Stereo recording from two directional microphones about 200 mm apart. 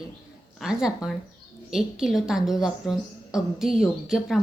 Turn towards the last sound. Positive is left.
turn(degrees=0)  # may be behind; listen again after turning